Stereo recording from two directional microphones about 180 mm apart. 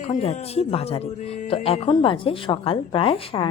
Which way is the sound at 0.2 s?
35° left (ahead or behind).